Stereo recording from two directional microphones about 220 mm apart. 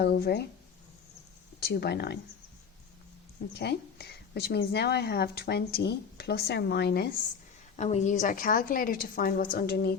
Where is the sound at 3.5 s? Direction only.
50° left (ahead or behind).